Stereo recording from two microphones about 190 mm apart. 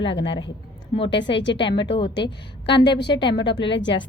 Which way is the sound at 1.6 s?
25° left (ahead or behind).